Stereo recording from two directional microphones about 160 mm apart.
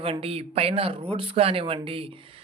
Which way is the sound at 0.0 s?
40° right (ahead or behind).